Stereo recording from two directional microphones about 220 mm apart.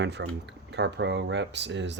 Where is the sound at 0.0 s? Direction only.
50° right (ahead or behind).